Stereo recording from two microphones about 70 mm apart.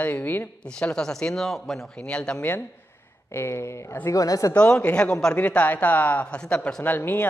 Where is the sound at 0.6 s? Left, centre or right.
Centre.